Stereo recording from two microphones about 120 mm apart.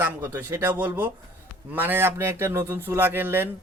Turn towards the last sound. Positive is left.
turn(degrees=-15)  # may be behind; listen again after turning